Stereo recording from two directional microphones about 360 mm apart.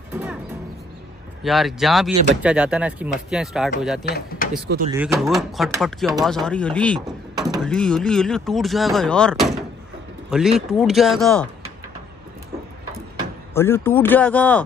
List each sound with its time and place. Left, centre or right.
1.4 s speech: centre
4.0 s speech: left
4.9 s speech: centre
13.6 s speech: centre